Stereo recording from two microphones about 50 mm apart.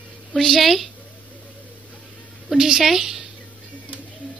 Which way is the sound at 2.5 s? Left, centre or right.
Centre.